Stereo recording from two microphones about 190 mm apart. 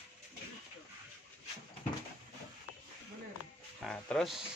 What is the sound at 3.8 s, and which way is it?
Speech, 5° left (ahead or behind).